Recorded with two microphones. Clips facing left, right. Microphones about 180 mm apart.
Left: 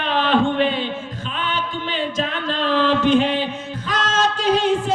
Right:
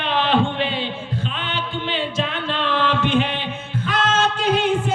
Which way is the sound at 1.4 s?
40° left (ahead or behind).